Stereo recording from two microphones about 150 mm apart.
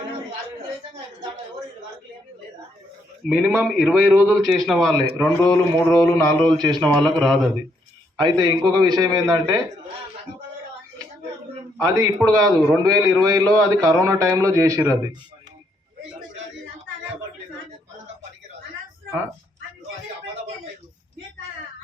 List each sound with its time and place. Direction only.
3.2 s a man's voice: 10° right (ahead or behind)
5.5 s speech: 20° left (ahead or behind)
6.5 s a man's voice: 30° right (ahead or behind)
6.8 s a man's voice: 5° left (ahead or behind)
8.2 s a man's voice: 25° right (ahead or behind)
11.8 s a man's voice: 25° right (ahead or behind)